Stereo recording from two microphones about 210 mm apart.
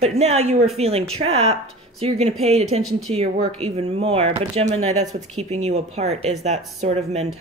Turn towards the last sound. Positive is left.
turn(degrees=-30)  # may be behind; listen again after turning